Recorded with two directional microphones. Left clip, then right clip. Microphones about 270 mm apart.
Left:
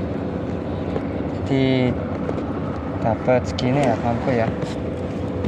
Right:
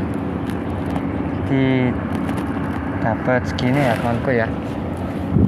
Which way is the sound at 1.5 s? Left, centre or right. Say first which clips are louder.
Right 1 dB; centre.